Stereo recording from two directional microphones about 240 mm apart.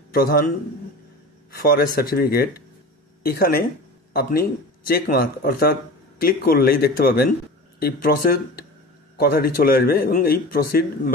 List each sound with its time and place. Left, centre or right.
0.1 s a man's voice: left
1.5 s a man's voice: left